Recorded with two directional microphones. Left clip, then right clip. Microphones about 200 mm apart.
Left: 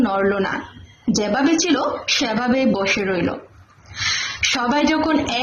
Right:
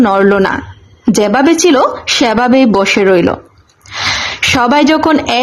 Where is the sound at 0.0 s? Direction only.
45° right (ahead or behind).